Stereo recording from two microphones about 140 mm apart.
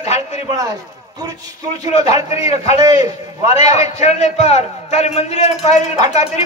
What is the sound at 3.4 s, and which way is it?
Speech, 50° left (ahead or behind).